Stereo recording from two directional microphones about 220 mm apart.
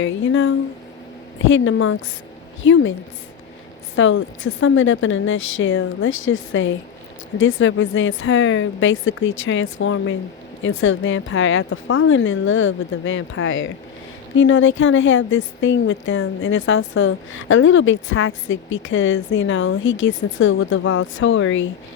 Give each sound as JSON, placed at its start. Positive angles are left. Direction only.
{"t": 0.0, "sound": "a woman's voice", "side_deg": 60}
{"t": 1.5, "sound": "a woman's voice", "side_deg": 60}
{"t": 3.9, "sound": "a woman's voice", "side_deg": 65}